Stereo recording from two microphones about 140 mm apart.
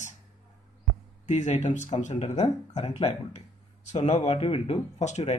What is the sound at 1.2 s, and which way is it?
Speech, 60° left (ahead or behind).